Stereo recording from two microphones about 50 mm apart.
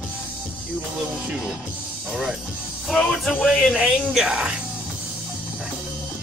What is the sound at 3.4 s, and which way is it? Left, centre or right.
Speech, centre.